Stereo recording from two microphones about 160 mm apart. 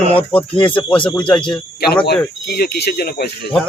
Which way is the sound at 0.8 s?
5° left (ahead or behind).